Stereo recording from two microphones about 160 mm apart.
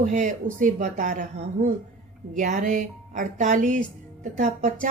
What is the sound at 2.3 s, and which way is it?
Speech, 55° right (ahead or behind).